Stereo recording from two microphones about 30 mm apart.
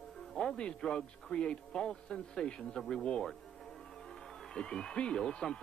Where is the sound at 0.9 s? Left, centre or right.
Left.